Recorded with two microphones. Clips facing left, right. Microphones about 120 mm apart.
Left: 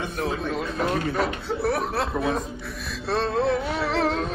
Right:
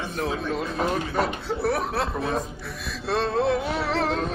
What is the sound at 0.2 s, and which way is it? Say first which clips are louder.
Speech: even; centre (ahead or behind).